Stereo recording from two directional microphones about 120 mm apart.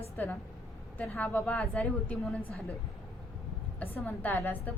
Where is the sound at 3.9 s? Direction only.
15° left (ahead or behind).